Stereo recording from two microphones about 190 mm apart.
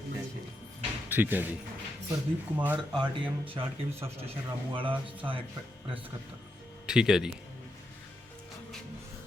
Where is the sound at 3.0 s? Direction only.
25° right (ahead or behind).